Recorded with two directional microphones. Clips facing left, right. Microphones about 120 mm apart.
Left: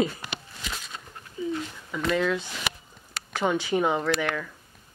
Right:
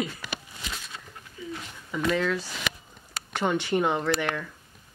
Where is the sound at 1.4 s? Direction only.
25° left (ahead or behind).